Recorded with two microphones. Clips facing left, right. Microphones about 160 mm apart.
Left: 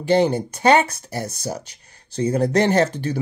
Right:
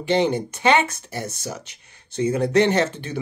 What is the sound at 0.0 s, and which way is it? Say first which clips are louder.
Speech: left 3 dB; 40° left (ahead or behind).